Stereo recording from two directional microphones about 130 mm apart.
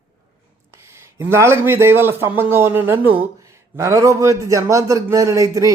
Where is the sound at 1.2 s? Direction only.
20° right (ahead or behind).